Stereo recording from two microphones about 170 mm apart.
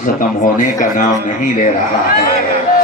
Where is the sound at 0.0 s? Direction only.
50° left (ahead or behind).